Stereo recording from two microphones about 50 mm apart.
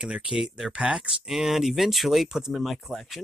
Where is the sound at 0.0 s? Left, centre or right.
Right.